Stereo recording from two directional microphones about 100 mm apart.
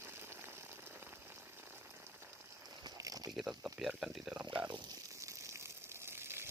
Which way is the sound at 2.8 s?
35° right (ahead or behind).